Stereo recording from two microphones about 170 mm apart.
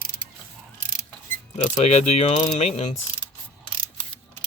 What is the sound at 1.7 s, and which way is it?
Speech, 40° left (ahead or behind).